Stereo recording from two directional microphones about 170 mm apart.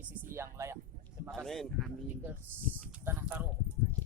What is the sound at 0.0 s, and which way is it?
Speech, 15° right (ahead or behind).